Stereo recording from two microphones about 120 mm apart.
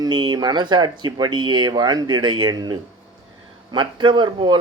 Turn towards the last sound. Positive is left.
turn(degrees=-40)  # may be behind; listen again after turning